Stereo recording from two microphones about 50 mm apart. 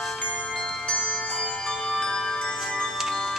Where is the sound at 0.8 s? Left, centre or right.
Left.